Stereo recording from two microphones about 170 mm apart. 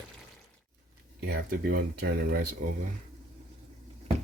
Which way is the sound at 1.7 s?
65° right (ahead or behind).